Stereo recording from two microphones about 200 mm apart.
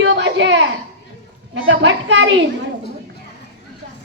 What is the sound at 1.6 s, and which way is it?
Speech, 60° right (ahead or behind).